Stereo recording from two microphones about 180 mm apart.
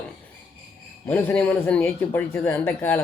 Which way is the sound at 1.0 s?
10° left (ahead or behind).